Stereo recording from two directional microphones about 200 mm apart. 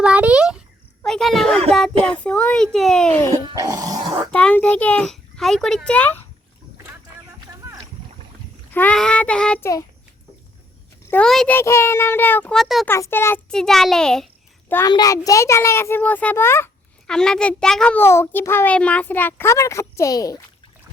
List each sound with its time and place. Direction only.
0.0 s a sound: 5° right (ahead or behind)
1.7 s a child's voice: 5° left (ahead or behind)
3.6 s dog: 20° right (ahead or behind)
4.3 s a child's voice: 5° left (ahead or behind)
8.7 s a child's voice: 5° left (ahead or behind)
11.1 s a child's voice: 5° left (ahead or behind)
12.9 s a child's voice: 10° left (ahead or behind)
14.7 s a child's voice: 15° left (ahead or behind)